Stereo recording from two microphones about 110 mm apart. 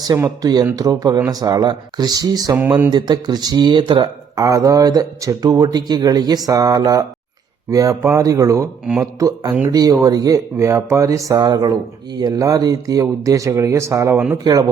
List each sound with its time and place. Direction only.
0.3 s speech: 35° right (ahead or behind)
2.6 s speech: 15° right (ahead or behind)
2.9 s speech: 40° right (ahead or behind)
4.4 s speech: 30° right (ahead or behind)
8.8 s speech: 5° right (ahead or behind)
9.1 s speech: 35° right (ahead or behind)
14.5 s speech: 40° right (ahead or behind)